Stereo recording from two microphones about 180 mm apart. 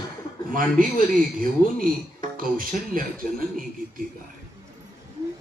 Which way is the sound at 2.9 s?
50° right (ahead or behind).